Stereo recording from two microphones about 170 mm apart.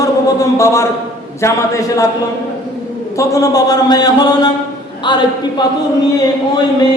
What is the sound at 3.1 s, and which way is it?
A man's voice, 20° left (ahead or behind).